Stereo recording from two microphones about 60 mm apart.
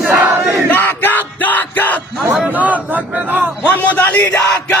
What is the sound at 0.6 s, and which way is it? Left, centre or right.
Crowd, left.